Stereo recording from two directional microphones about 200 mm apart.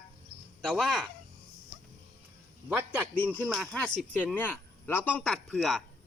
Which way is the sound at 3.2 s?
5° left (ahead or behind).